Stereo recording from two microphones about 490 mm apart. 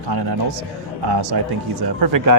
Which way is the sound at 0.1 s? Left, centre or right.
Right.